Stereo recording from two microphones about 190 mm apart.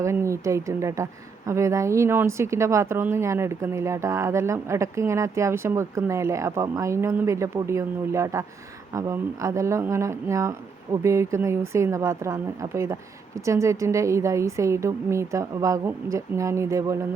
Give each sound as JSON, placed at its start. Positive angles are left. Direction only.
{"t": 0.0, "sound": "a woman's voice", "side_deg": -15}